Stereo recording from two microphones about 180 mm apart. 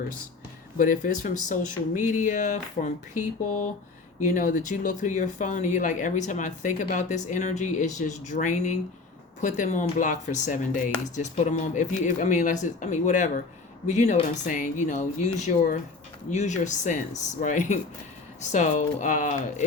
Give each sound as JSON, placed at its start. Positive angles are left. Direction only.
{"t": 0.8, "sound": "speech", "side_deg": 50}
{"t": 4.4, "sound": "speech", "side_deg": 45}